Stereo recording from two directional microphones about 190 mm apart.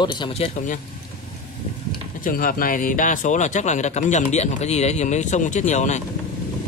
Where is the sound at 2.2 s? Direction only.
45° left (ahead or behind).